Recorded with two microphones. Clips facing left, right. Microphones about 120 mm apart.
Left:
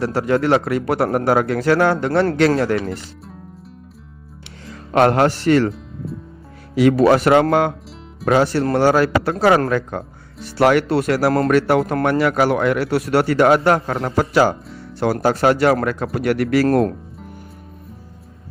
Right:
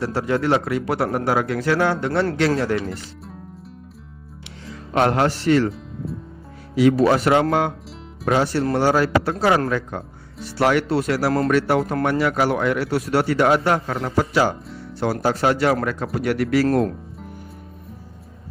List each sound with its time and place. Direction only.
0.0 s a man's voice: 55° left (ahead or behind)
4.6 s speech: 55° left (ahead or behind)
6.7 s speech: 65° left (ahead or behind)
14.9 s speech: 70° left (ahead or behind); by 16.9 s 55° left (ahead or behind)